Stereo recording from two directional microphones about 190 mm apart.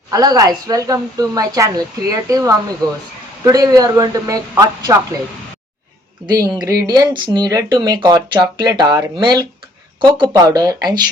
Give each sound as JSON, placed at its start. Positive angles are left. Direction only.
{"t": 0.1, "sound": "speech", "side_deg": -20}
{"t": 6.6, "sound": "speech", "side_deg": -20}